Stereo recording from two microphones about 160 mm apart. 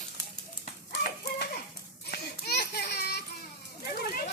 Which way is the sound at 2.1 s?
85° left.